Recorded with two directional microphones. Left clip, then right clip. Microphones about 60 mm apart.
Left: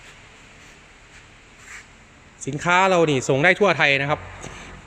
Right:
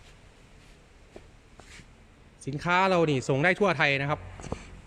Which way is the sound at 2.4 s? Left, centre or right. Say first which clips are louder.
Left 8 dB; right.